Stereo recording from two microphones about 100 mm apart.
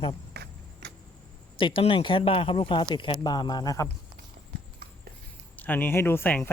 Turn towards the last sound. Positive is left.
turn(degrees=20)  # may be behind; listen again after turning